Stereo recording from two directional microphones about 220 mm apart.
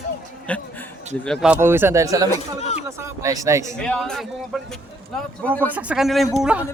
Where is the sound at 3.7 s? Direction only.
5° left (ahead or behind).